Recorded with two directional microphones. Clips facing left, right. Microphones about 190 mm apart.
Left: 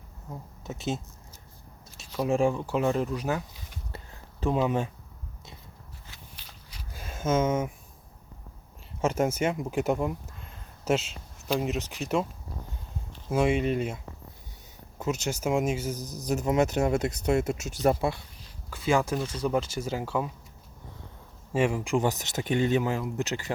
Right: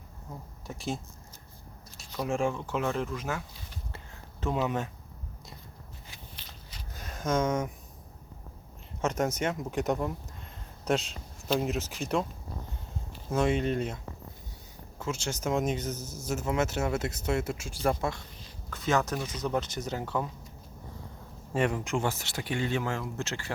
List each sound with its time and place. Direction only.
0.7 s speech: 20° left (ahead or behind)
2.1 s speech: 15° left (ahead or behind)
6.4 s a sound: 10° left (ahead or behind)
9.0 s speech: 10° left (ahead or behind)
13.3 s speech: 5° left (ahead or behind)
15.3 s speech: 10° left (ahead or behind)
18.7 s speech: 10° left (ahead or behind)
21.5 s speech: 10° left (ahead or behind)